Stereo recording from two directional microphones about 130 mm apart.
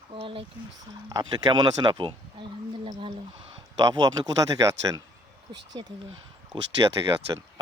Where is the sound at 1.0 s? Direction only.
30° right (ahead or behind).